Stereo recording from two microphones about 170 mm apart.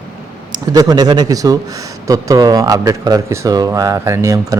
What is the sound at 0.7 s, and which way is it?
Speech, 20° right (ahead or behind).